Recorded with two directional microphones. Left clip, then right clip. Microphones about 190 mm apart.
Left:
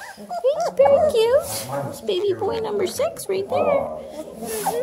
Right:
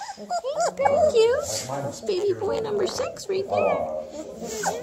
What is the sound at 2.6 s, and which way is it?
A woman's voice, 15° left (ahead or behind).